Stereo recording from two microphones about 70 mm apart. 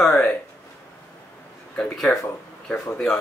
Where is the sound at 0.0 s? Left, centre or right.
Centre.